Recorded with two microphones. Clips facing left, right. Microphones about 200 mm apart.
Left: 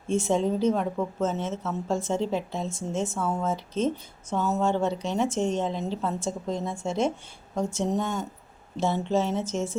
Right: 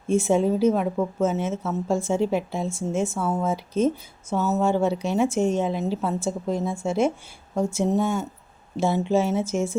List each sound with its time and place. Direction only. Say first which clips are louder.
0.1 s a woman's voice: right 4 dB; 10° right (ahead or behind)